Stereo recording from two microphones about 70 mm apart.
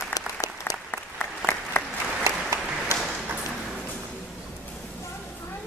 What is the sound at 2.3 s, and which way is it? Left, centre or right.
Applause, right.